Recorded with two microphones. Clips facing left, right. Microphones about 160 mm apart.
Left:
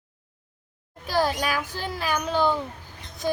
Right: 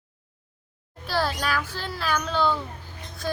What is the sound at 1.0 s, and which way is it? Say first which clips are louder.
A child's voice: left 2 dB; 15° left (ahead or behind).